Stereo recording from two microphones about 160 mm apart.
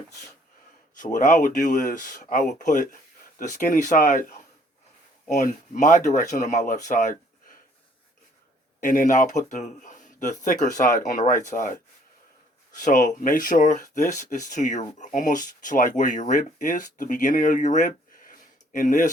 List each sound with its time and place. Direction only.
0.9 s speech: 55° left (ahead or behind)
5.4 s speech: 55° left (ahead or behind)
8.8 s speech: 55° left (ahead or behind)
12.8 s speech: 55° left (ahead or behind)